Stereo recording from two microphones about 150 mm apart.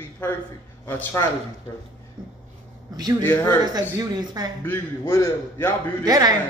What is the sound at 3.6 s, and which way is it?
Speech, 25° right (ahead or behind).